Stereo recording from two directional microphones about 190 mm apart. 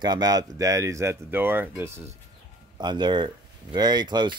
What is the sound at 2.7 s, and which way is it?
Speech, 25° right (ahead or behind).